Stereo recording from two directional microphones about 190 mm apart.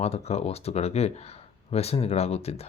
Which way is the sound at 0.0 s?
35° left (ahead or behind).